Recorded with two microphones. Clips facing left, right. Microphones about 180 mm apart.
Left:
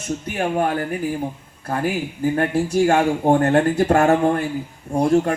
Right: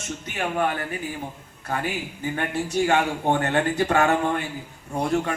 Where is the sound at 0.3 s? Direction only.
35° left (ahead or behind).